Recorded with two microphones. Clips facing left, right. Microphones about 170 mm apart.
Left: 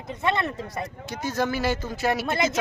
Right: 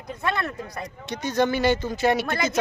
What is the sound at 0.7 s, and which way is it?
Speech, 5° left (ahead or behind).